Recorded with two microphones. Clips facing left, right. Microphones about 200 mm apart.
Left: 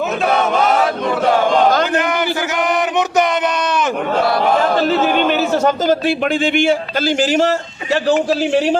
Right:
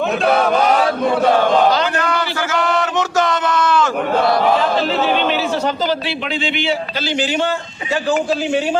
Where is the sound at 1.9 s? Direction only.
20° left (ahead or behind).